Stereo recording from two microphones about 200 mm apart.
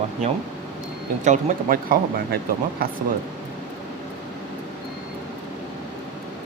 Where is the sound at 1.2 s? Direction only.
40° right (ahead or behind).